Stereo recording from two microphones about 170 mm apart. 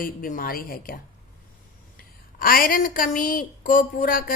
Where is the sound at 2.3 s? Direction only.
55° left (ahead or behind).